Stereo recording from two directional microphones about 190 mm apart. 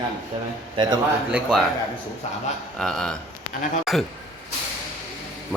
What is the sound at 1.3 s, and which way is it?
Speech, 5° right (ahead or behind).